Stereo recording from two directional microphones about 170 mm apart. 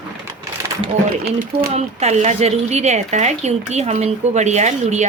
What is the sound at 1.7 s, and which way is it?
Speech, 40° right (ahead or behind).